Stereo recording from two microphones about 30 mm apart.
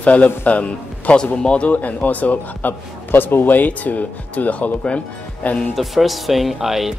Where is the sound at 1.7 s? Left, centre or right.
Left.